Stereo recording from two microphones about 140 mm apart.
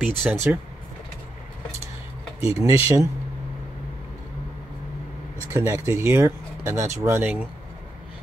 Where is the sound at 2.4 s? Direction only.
20° right (ahead or behind).